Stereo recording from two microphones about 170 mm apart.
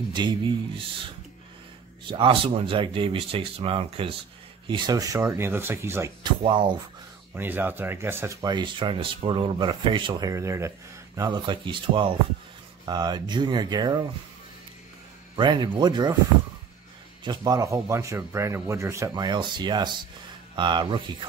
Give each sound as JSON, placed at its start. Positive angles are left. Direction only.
{"t": 0.1, "sound": "speech", "side_deg": -25}
{"t": 2.0, "sound": "speech", "side_deg": -30}
{"t": 6.2, "sound": "speech", "side_deg": -30}
{"t": 7.3, "sound": "speech", "side_deg": -10}
{"t": 10.3, "sound": "speech", "side_deg": -15}
{"t": 15.3, "sound": "speech", "side_deg": -25}
{"t": 17.2, "sound": "speech", "side_deg": -25}